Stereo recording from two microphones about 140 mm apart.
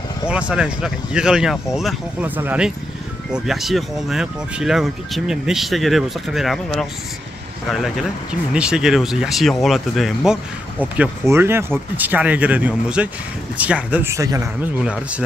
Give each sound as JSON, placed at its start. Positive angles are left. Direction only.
{"t": 0.3, "sound": "speech", "side_deg": -10}
{"t": 2.2, "sound": "speech", "side_deg": -15}
{"t": 8.5, "sound": "speech", "side_deg": -5}
{"t": 11.2, "sound": "speech", "side_deg": -15}
{"t": 14.1, "sound": "speech", "side_deg": -25}
{"t": 14.6, "sound": "speech", "side_deg": -10}